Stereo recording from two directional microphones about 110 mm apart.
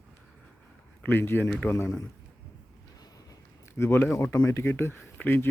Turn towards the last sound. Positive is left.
turn(degrees=15)  # may be behind; listen again after turning